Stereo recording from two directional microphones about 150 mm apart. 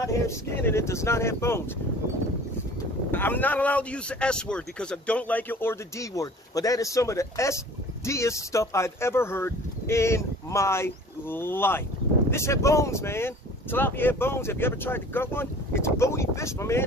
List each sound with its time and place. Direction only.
0.0 s speech: 20° left (ahead or behind)
3.1 s speech: 15° left (ahead or behind)